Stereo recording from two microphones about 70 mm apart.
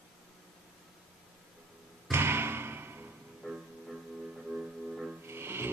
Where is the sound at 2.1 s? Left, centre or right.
Right.